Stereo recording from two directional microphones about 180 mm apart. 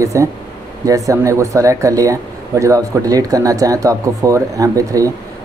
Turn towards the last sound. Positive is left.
turn(degrees=-20)  # may be behind; listen again after turning